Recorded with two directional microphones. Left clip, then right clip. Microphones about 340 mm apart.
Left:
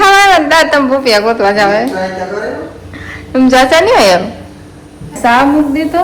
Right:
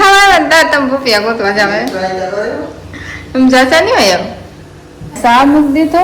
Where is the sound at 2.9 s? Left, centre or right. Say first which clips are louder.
Left 1 dB; centre.